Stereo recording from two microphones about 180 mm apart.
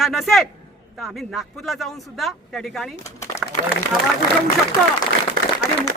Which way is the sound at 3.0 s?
15° left (ahead or behind).